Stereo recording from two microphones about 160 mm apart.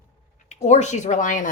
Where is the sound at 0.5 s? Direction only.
45° left (ahead or behind).